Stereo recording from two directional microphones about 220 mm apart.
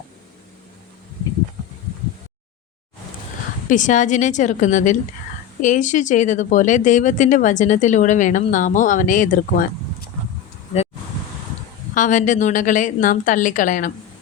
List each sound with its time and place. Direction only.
3.7 s speech: 35° left (ahead or behind)
11.9 s speech: 35° left (ahead or behind)